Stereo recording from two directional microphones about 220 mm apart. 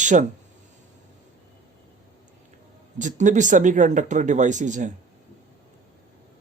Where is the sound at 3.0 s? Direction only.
35° right (ahead or behind).